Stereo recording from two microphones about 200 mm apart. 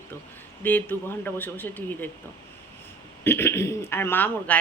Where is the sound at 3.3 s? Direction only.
10° left (ahead or behind).